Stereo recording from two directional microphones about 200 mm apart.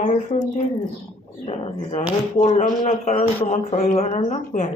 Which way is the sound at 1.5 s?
30° left (ahead or behind).